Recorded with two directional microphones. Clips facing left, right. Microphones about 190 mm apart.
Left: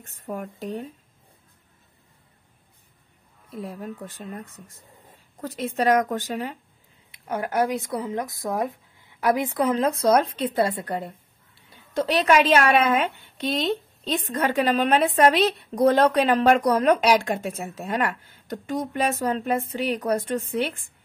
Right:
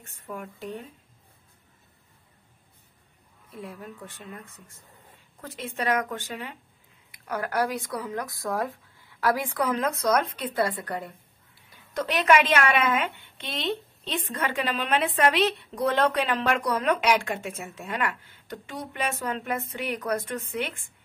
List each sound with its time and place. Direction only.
0.2 s a woman's voice: 40° left (ahead or behind)
3.5 s a woman's voice: 40° left (ahead or behind)
5.4 s a woman's voice: 40° left (ahead or behind)
7.1 s a woman's voice: 25° left (ahead or behind)